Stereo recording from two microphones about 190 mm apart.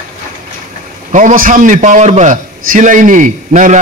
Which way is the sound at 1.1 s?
40° right (ahead or behind).